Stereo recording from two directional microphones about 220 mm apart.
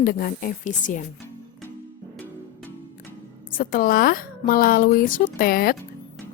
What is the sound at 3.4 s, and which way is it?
A woman's voice, 40° left (ahead or behind).